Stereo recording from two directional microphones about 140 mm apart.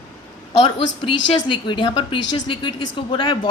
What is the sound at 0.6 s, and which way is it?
Speech, 35° left (ahead or behind).